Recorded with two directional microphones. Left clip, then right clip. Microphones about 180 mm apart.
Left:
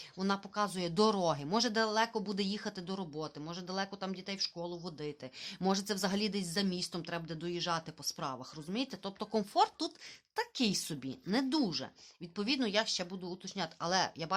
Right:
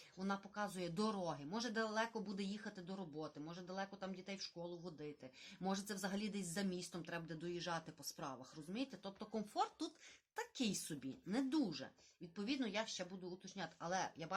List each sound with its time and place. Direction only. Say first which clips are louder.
0.2 s speech: left 10 dB; 45° left (ahead or behind)